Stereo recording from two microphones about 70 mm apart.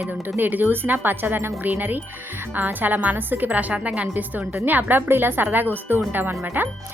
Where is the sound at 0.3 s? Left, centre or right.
Right.